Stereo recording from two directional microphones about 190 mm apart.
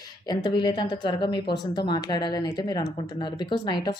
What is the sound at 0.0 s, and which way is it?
A woman's voice, 20° left (ahead or behind).